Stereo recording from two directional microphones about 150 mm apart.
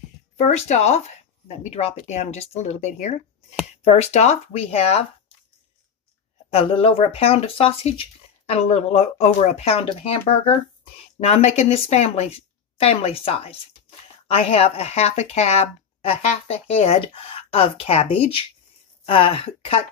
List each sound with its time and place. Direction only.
0.4 s speech: 50° left (ahead or behind)
6.5 s speech: 40° left (ahead or behind)